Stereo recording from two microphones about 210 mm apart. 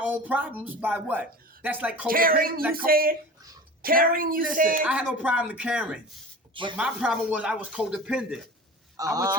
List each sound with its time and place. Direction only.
0.0 s a woman's voice: 10° right (ahead or behind)
2.0 s speech: 45° right (ahead or behind)
4.9 s speech: 5° right (ahead or behind)
6.5 s speech: 25° right (ahead or behind)
6.7 s speech: 5° right (ahead or behind)
9.0 s a woman's voice: 15° right (ahead or behind)